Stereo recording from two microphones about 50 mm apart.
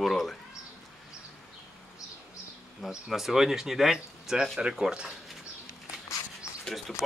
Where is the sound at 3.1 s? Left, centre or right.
Centre.